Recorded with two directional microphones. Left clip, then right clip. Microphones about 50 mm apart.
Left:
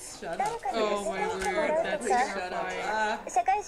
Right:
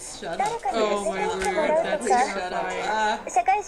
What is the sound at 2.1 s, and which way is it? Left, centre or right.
A woman's voice, left.